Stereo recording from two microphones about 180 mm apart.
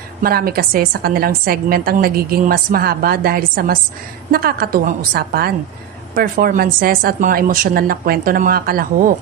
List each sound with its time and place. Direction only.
0.2 s a woman's voice: 55° right (ahead or behind)